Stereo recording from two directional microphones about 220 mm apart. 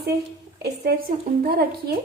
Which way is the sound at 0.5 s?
45° right (ahead or behind).